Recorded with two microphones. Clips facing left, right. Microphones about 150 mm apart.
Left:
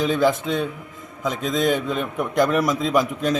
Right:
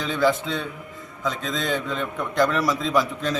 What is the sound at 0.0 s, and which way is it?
A man's voice, 15° left (ahead or behind).